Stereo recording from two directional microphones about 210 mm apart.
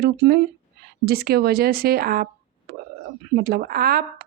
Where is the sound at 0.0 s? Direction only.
50° right (ahead or behind).